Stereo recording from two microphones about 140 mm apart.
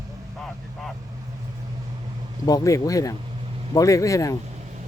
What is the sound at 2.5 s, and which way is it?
Speech, 25° left (ahead or behind).